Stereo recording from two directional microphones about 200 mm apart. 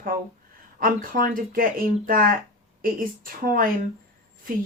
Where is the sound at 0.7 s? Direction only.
45° right (ahead or behind).